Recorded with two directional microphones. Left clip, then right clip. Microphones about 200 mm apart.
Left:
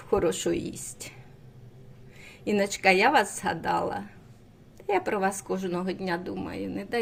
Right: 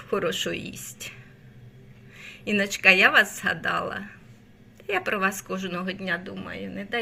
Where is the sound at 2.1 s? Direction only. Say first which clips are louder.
Right 1 dB; 20° left (ahead or behind).